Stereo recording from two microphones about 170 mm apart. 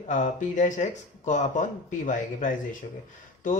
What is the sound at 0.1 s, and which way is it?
Speech, 50° left (ahead or behind).